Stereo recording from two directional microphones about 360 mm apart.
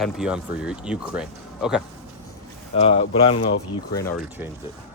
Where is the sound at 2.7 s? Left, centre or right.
Centre.